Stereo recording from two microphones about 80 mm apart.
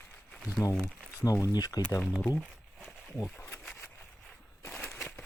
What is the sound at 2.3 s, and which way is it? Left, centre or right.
Crumpling, centre.